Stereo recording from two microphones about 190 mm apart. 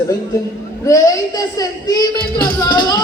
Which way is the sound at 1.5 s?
20° left (ahead or behind).